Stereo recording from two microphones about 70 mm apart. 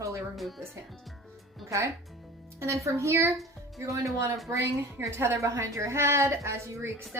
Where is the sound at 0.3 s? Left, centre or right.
Centre.